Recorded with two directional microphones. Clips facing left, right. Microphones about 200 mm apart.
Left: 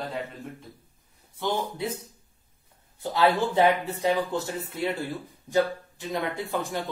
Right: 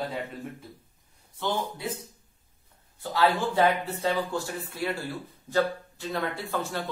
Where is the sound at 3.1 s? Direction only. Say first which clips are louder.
Left 2 dB; 20° left (ahead or behind).